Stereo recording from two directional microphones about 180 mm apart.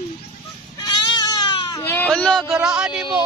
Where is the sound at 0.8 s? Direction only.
25° left (ahead or behind).